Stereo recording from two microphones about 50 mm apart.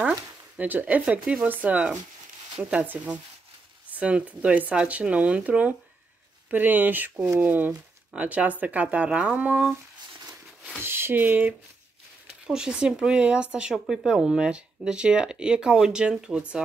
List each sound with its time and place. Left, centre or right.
0.6 s speech: right
1.2 s speech: centre
1.5 s speech: right
2.9 s speech: right
10.8 s speech: right
12.4 s speech: centre